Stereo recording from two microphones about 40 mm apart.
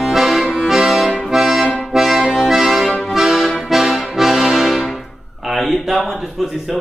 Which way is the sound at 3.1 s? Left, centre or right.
Centre.